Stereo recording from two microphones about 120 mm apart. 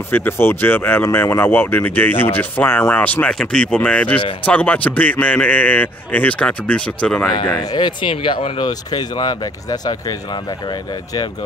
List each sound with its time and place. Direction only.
0.1 s a man's voice: 20° left (ahead or behind)
7.7 s speech: 40° left (ahead or behind)
8.6 s speech: 35° left (ahead or behind)